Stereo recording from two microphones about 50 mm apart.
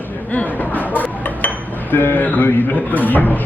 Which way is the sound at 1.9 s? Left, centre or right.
Left.